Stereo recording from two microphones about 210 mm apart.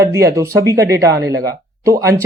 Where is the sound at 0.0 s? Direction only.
15° right (ahead or behind).